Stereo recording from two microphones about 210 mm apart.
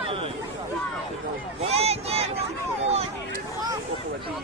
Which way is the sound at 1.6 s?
30° right (ahead or behind).